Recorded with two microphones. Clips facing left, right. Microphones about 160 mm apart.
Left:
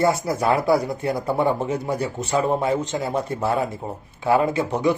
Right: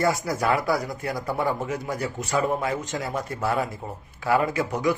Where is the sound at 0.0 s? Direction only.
25° left (ahead or behind).